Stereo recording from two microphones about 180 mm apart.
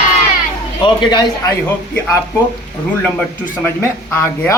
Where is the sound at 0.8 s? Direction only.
25° left (ahead or behind).